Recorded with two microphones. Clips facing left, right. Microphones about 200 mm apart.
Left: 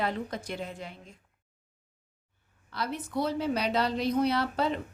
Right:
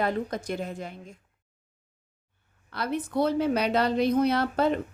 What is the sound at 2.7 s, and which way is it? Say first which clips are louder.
A woman's voice: right 5 dB; 55° right (ahead or behind).